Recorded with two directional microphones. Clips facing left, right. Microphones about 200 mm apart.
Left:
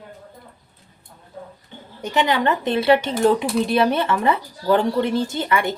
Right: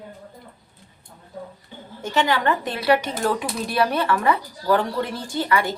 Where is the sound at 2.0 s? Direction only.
20° left (ahead or behind).